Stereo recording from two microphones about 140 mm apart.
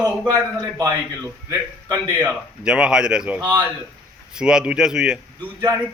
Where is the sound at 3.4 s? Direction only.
25° right (ahead or behind).